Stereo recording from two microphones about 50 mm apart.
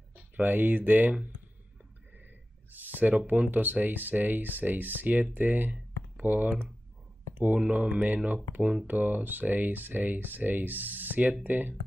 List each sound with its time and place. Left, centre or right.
0.1 s speech: right
2.7 s speech: right